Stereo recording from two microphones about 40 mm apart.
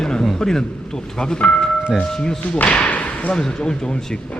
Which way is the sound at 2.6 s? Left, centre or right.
Left.